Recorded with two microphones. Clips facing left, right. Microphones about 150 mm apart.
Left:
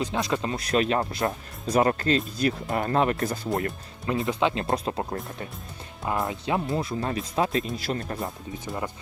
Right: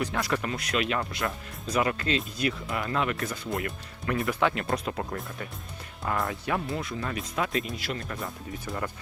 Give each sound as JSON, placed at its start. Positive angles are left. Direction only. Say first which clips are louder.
{"t": 0.0, "sound": "speech", "louder": "left 2 dB", "side_deg": 20}
{"t": 4.0, "sound": "speech", "louder": "left 2 dB", "side_deg": 25}